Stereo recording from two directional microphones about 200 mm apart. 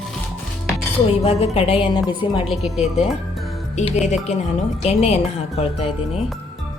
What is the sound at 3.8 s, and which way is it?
A woman's voice, 35° left (ahead or behind).